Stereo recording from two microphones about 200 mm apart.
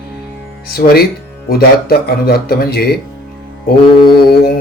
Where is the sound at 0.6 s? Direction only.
50° left (ahead or behind).